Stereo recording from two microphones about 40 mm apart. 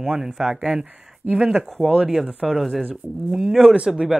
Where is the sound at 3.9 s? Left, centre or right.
Centre.